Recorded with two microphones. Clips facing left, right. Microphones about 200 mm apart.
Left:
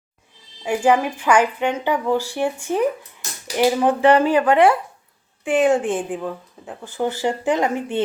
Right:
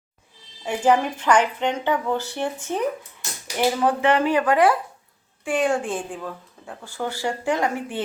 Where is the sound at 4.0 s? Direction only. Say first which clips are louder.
Left 4 dB; 35° left (ahead or behind).